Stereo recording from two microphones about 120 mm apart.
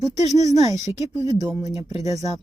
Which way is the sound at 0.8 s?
25° right (ahead or behind).